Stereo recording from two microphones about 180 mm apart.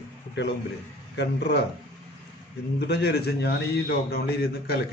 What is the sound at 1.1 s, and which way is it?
Speech, 70° left (ahead or behind).